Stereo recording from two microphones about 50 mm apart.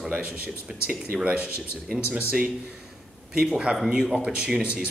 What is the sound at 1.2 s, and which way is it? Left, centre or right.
Speech, right.